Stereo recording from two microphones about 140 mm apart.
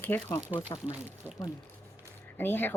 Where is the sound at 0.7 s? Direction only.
30° left (ahead or behind).